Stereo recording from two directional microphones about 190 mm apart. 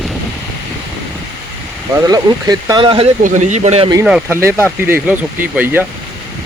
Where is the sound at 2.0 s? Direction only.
20° right (ahead or behind).